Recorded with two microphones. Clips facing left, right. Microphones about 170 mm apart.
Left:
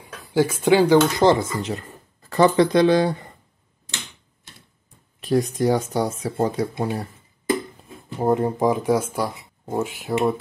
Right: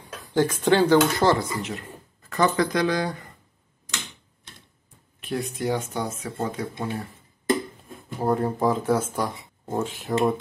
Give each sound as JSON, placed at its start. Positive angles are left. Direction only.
{"t": 0.0, "sound": "speech", "side_deg": 10}
{"t": 1.6, "sound": "speech", "side_deg": 35}
{"t": 5.2, "sound": "speech", "side_deg": 40}
{"t": 8.2, "sound": "speech", "side_deg": 20}